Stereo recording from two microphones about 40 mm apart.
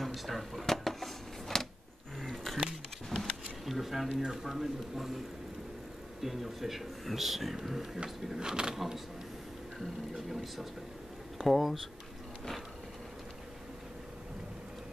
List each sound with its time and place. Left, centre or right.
0.0 s a sound: centre
2.3 s a sound: centre
4.2 s speech: centre
6.2 s speech: centre
8.7 s speech: centre
10.1 s speech: centre